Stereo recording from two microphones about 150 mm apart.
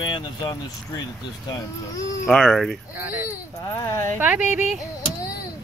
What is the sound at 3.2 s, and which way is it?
Speech, 20° left (ahead or behind).